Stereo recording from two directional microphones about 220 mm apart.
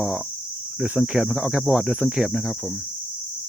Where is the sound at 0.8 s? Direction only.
5° right (ahead or behind).